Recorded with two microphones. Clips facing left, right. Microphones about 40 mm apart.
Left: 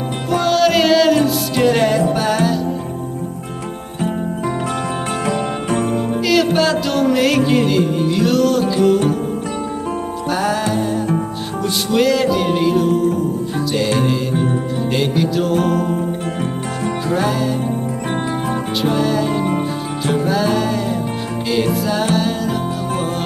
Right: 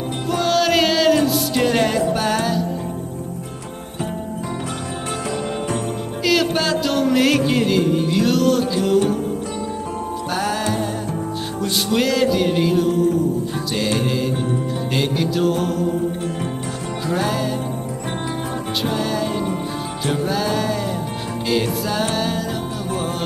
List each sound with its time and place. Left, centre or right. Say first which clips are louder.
0.3 s music: left 3 dB; centre
5.2 s music: left 4 dB; left
6.2 s music: left 2 dB; centre
8.8 s music: left 4 dB; left
10.3 s music: left 4 dB; centre
11.9 s music: left 3 dB; centre
14.3 s music: left 4 dB; left
14.9 s music: left 3 dB; centre
17.1 s music: left 2 dB; centre
18.9 s music: left 6 dB; centre